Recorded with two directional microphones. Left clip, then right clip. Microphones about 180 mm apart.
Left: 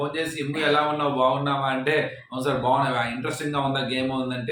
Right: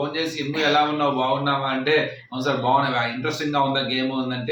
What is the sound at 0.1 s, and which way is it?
A man's voice, 10° left (ahead or behind).